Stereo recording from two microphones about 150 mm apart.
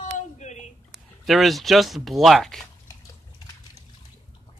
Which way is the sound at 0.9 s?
Centre (ahead or behind).